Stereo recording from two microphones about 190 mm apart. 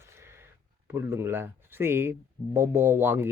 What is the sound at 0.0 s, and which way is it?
Speech, 15° right (ahead or behind).